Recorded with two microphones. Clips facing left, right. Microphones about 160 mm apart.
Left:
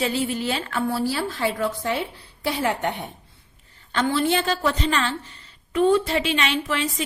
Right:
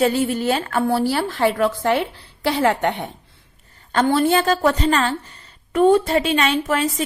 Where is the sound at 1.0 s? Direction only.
65° right (ahead or behind).